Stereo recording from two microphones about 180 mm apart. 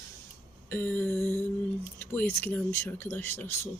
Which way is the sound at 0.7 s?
10° left (ahead or behind).